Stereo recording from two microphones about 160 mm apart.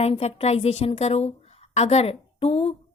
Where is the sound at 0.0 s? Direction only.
40° left (ahead or behind).